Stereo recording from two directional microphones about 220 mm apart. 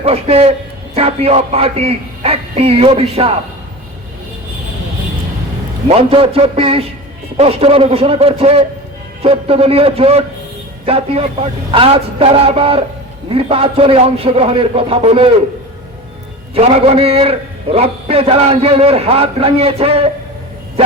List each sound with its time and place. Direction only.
0.0 s a man's voice: 25° right (ahead or behind)
5.9 s a man's voice: 25° right (ahead or behind)
16.6 s a man's voice: 25° right (ahead or behind)